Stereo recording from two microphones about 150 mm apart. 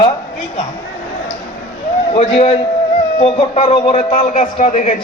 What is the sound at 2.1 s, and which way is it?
A man's voice, 45° left (ahead or behind).